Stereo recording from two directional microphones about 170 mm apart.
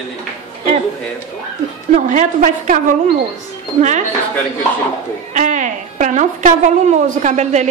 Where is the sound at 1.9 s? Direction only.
45° right (ahead or behind).